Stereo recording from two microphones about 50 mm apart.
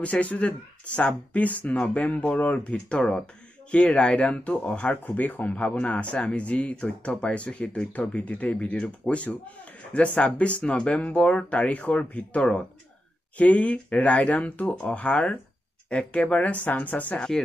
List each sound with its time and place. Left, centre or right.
0.0 s speech: left
5.0 s speech: left
14.7 s speech: centre
15.0 s speech: left